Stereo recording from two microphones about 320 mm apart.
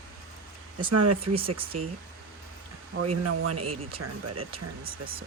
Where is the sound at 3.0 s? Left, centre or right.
Right.